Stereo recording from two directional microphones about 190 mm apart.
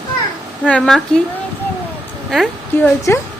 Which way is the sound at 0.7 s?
5° left (ahead or behind).